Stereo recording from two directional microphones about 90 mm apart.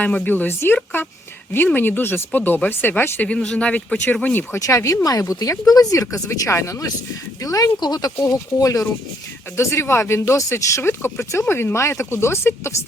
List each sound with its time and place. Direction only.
0.0 s speech: 15° left (ahead or behind)
4.6 s speech: 35° left (ahead or behind)